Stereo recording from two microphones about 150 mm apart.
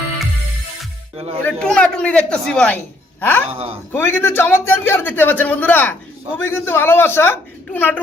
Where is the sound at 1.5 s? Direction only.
5° left (ahead or behind).